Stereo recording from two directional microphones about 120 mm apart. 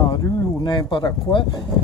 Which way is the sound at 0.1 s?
40° left (ahead or behind).